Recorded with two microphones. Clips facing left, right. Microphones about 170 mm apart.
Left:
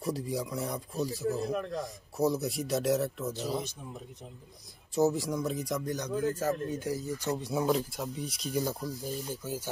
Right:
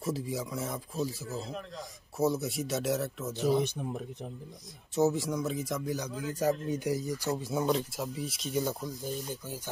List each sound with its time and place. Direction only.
0.0 s speech: centre (ahead or behind)
1.5 s speech: 50° left (ahead or behind)
1.8 s speech: centre (ahead or behind)
3.6 s speech: 65° right (ahead or behind)
4.9 s speech: centre (ahead or behind)
6.2 s speech: 15° right (ahead or behind)
7.3 s speech: centre (ahead or behind)